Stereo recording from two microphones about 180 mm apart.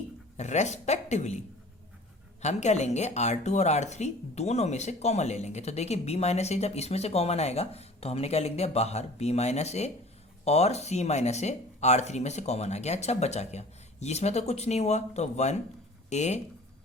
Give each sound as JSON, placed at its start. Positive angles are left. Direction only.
{"t": 0.3, "sound": "speech", "side_deg": 40}
{"t": 2.4, "sound": "speech", "side_deg": 40}